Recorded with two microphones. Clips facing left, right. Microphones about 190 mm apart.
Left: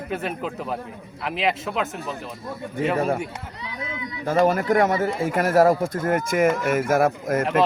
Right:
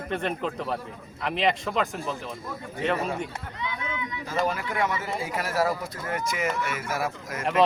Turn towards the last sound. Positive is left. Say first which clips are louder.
# left 11 dB
turn(degrees=50)  # may be behind; listen again after turning